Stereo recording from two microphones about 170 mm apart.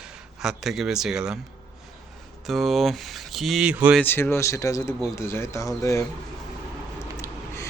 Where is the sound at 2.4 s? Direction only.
Centre (ahead or behind).